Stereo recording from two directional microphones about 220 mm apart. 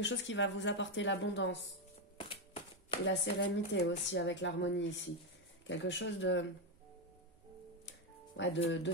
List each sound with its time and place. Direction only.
0.0 s speech: 55° left (ahead or behind)
2.1 s music: 25° left (ahead or behind)
3.1 s speech: 55° left (ahead or behind)
8.4 s speech: 55° left (ahead or behind)